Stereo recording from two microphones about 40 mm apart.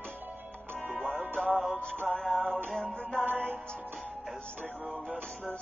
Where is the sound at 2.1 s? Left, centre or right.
Centre.